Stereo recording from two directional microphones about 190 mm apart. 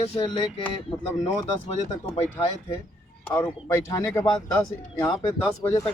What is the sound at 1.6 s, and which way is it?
Speech, 35° left (ahead or behind).